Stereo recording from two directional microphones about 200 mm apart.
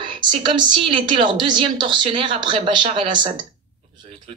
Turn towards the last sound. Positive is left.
turn(degrees=-25)  # may be behind; listen again after turning